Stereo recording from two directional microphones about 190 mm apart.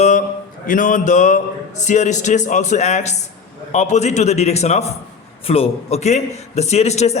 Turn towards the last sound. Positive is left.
turn(degrees=35)  # may be behind; listen again after turning